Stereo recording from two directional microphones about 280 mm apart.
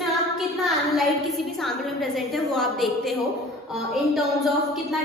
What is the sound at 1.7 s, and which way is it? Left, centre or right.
A woman's voice, centre.